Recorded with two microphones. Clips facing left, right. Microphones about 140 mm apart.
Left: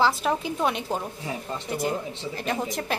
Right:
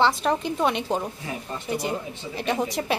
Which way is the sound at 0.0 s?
Centre (ahead or behind).